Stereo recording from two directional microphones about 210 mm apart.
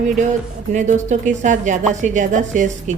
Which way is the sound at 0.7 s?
35° right (ahead or behind).